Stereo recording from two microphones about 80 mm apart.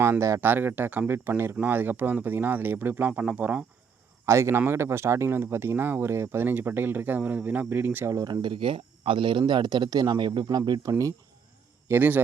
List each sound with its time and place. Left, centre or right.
0.0 s speech: right
0.4 s speech: right
4.3 s speech: right
8.1 s speech: right
9.4 s speech: right
10.7 s speech: right
11.9 s speech: right